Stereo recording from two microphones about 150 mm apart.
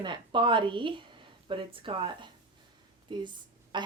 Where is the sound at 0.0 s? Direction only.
30° right (ahead or behind).